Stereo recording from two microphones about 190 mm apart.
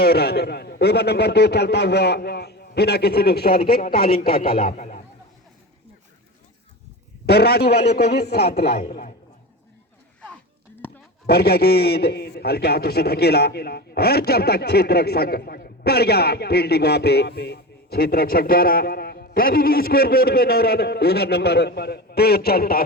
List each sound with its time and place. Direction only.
0.0 s a man's voice: 55° left (ahead or behind)
7.3 s a man's voice: 55° left (ahead or behind)
10.8 s a sound: 10° left (ahead or behind)
11.3 s a man's voice: 55° left (ahead or behind)